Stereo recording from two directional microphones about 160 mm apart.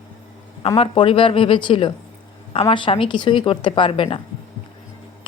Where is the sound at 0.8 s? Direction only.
35° left (ahead or behind).